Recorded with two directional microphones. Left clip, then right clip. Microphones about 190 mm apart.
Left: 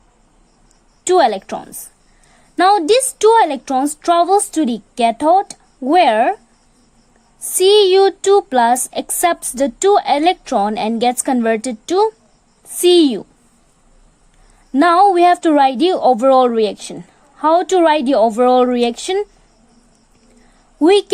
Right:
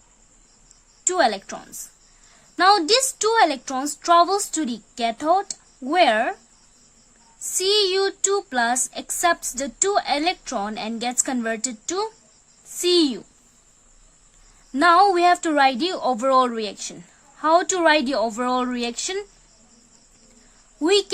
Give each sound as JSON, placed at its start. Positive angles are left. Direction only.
{"t": 1.0, "sound": "a woman's voice", "side_deg": 30}
{"t": 7.6, "sound": "a woman's voice", "side_deg": 30}
{"t": 14.7, "sound": "a woman's voice", "side_deg": 25}
{"t": 20.7, "sound": "speech", "side_deg": 25}